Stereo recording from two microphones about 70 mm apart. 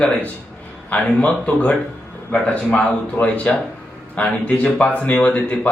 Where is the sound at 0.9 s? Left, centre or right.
Left.